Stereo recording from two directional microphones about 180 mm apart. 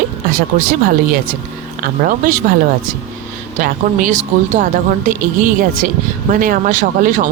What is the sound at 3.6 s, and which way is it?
Speech, 45° right (ahead or behind).